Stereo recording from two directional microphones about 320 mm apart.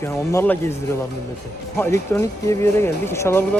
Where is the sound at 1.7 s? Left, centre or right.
Centre.